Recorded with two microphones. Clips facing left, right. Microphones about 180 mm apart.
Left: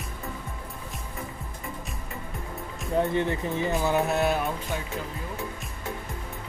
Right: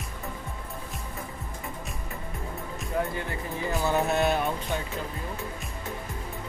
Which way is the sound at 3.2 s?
20° left (ahead or behind).